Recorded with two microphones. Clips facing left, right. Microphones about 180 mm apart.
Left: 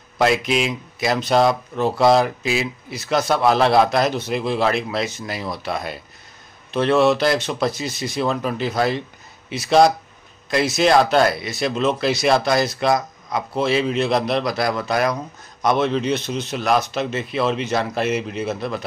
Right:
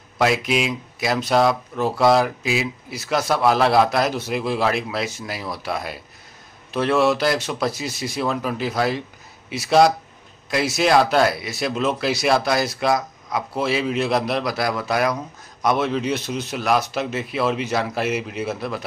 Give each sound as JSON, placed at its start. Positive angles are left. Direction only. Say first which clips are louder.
{"t": 0.2, "sound": "a man's voice", "louder": "left 1 dB", "side_deg": -5}